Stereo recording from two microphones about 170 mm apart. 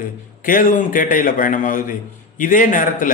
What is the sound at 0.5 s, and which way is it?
A man's voice, 55° left (ahead or behind).